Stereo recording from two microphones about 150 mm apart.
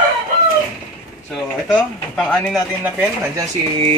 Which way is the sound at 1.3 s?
5° left (ahead or behind).